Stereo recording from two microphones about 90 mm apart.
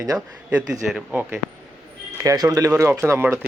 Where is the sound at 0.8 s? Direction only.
15° right (ahead or behind).